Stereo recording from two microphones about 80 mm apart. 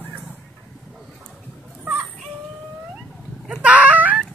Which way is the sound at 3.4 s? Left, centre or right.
Centre.